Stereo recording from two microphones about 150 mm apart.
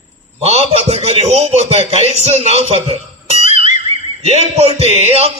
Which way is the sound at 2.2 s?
45° right (ahead or behind).